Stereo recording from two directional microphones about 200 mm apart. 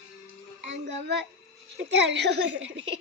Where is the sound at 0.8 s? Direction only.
60° right (ahead or behind).